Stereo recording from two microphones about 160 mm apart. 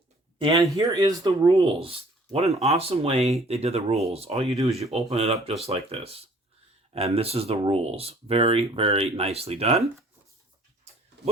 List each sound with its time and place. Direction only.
0.3 s speech: 25° right (ahead or behind)